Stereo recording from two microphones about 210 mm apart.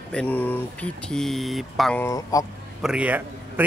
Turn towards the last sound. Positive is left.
turn(degrees=-10)  # may be behind; listen again after turning